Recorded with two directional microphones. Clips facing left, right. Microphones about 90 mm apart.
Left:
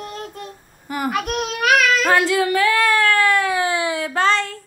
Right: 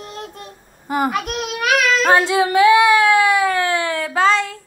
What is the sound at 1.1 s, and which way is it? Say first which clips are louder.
Speech: even; 45° left (ahead or behind).